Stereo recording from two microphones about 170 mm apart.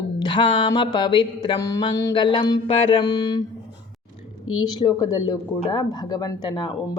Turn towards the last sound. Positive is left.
turn(degrees=25)  # may be behind; listen again after turning